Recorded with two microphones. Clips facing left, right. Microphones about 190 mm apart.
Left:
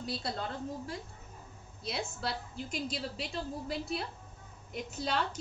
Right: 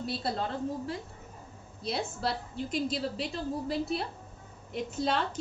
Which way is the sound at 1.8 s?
Centre (ahead or behind).